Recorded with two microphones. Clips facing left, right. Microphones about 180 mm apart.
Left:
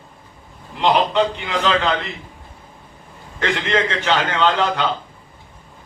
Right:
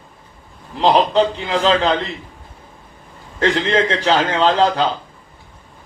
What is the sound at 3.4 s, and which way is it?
A man's voice, 30° right (ahead or behind).